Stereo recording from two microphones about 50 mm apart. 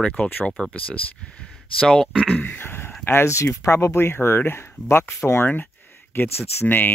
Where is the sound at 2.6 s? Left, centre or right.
Left.